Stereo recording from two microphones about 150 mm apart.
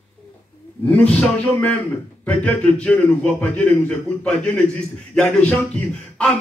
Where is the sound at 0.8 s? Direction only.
10° left (ahead or behind).